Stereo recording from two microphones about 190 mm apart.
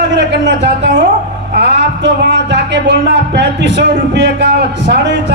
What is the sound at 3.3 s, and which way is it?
A man's voice, 65° right (ahead or behind).